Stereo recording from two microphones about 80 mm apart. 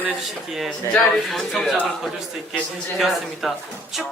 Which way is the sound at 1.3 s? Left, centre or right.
Centre.